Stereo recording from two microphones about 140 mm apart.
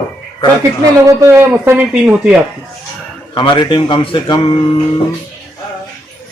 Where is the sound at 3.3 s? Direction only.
35° left (ahead or behind).